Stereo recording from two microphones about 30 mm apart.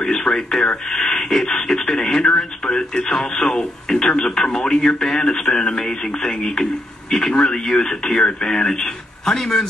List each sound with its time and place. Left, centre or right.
0.0 s radio: centre
1.1 s speech: left
2.3 s radio: centre
5.5 s speech: left
5.9 s radio: centre
7.4 s speech: centre